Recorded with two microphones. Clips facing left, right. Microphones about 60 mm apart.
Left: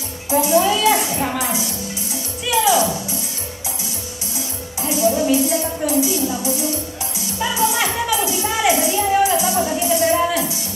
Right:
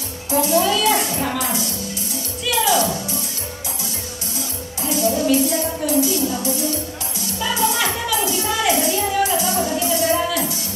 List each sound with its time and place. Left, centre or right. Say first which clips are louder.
0.3 s speech: left 2 dB; centre
2.4 s music: left 2 dB; left
4.8 s a sound: left 1 dB; centre
7.3 s music: left 1 dB; centre